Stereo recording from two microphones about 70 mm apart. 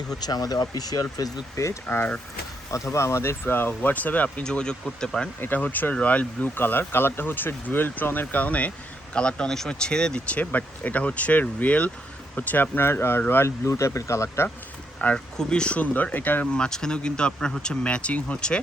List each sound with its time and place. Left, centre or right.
0.2 s speech: left
1.9 s speech: left
2.7 s speech: left
4.4 s speech: centre
5.4 s speech: left
15.0 s speech: centre